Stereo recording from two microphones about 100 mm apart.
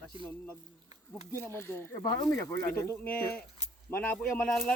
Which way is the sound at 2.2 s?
25° left (ahead or behind).